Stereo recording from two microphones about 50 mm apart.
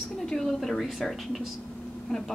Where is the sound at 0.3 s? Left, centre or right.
Centre.